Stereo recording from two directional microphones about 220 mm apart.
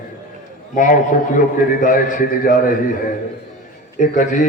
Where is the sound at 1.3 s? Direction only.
35° left (ahead or behind).